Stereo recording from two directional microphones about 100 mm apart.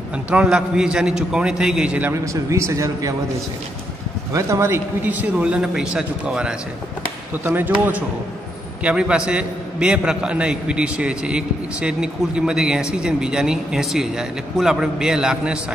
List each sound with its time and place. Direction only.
0.3 s a man's voice: 10° right (ahead or behind)
2.2 s speech: 30° right (ahead or behind)
4.3 s a man's voice: 30° right (ahead or behind); by 15.6 s 10° right (ahead or behind)